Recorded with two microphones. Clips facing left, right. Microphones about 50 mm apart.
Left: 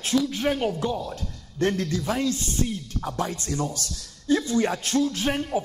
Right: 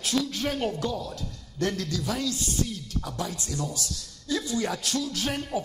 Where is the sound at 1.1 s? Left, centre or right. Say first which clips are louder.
Left 2 dB; left.